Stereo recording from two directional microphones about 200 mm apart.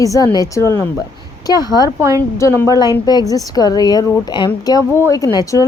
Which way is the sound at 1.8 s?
15° right (ahead or behind).